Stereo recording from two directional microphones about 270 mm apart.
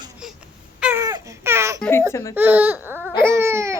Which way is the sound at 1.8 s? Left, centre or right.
Centre.